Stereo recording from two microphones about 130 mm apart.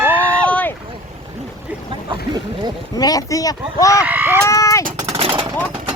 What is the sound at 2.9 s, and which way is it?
Speech, 30° left (ahead or behind).